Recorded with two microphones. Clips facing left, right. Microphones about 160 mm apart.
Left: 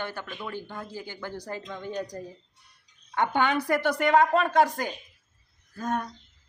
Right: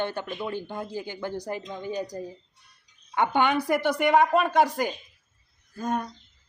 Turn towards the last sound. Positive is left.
turn(degrees=0)  # may be behind; listen again after turning